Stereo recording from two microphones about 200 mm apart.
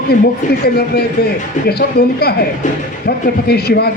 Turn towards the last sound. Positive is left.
turn(degrees=50)  # may be behind; listen again after turning